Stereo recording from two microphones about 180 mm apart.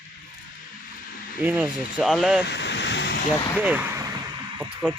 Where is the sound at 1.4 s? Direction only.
10° right (ahead or behind).